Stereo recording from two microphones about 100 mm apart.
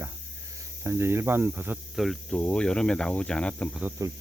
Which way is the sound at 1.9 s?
Centre (ahead or behind).